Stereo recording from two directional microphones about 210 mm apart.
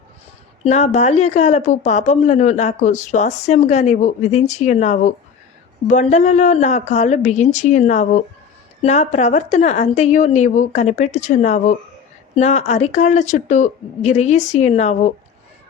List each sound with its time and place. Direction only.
0.6 s speech: 35° left (ahead or behind)